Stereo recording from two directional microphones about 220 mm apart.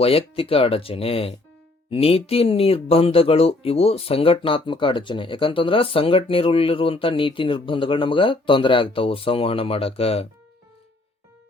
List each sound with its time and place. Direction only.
0.0 s speech: 25° left (ahead or behind)